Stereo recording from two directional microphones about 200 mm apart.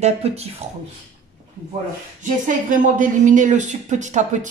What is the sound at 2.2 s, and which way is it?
Speech, 40° right (ahead or behind).